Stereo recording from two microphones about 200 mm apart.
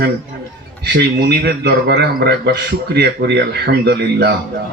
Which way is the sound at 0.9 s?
55° right (ahead or behind).